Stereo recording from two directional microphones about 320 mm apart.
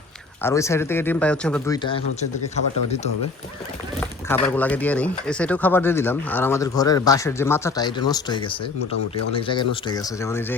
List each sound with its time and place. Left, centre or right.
0.4 s speech: centre
4.3 s speech: centre